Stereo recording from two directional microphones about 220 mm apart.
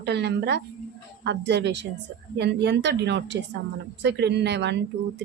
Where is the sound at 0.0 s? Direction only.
50° right (ahead or behind).